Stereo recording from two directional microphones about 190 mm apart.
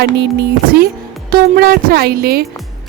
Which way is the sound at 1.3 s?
50° right (ahead or behind).